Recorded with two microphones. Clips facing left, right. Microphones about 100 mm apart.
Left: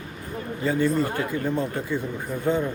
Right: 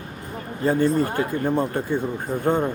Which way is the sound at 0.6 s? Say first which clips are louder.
Right 3 dB; 50° right (ahead or behind).